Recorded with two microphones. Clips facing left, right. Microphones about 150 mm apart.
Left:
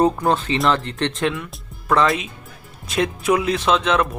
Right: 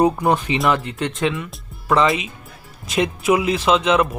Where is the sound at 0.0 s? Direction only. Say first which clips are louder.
Right 1 dB; 15° right (ahead or behind).